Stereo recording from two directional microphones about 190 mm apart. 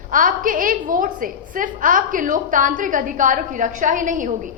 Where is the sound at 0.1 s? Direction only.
45° right (ahead or behind).